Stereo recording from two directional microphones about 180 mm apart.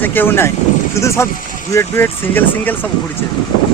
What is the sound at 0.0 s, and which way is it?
Speech, 10° left (ahead or behind).